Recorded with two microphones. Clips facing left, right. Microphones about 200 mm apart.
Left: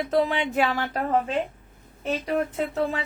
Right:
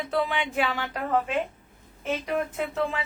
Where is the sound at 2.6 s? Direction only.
40° left (ahead or behind).